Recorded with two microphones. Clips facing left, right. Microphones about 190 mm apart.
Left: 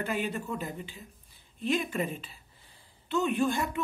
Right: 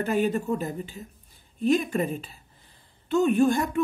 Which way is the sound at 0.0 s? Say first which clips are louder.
Right 8 dB; 45° right (ahead or behind).